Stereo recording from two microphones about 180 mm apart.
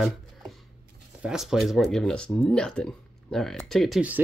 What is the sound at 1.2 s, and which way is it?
Speech, 5° right (ahead or behind).